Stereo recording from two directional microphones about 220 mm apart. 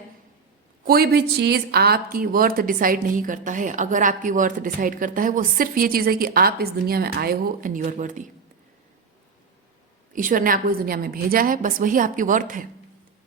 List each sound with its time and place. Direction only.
0.9 s speech: 45° right (ahead or behind)
10.1 s speech: 35° right (ahead or behind)